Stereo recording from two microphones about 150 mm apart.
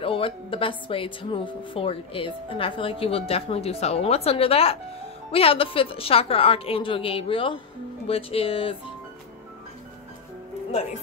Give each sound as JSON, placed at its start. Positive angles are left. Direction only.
{"t": 0.0, "sound": "a woman's voice", "side_deg": 35}